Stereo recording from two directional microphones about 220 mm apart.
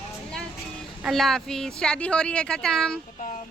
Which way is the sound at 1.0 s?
Centre (ahead or behind).